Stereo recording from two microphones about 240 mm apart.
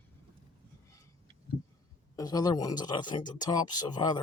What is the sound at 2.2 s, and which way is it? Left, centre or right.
Speech, centre.